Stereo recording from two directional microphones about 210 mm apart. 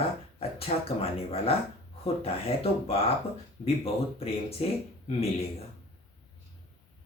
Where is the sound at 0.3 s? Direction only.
30° left (ahead or behind).